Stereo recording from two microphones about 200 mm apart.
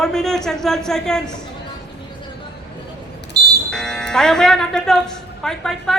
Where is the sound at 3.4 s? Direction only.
55° right (ahead or behind).